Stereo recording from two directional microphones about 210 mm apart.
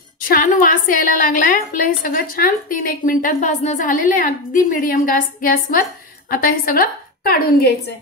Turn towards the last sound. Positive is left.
turn(degrees=45)  # may be behind; listen again after turning